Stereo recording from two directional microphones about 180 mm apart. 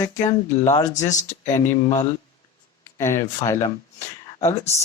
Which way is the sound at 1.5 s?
15° left (ahead or behind).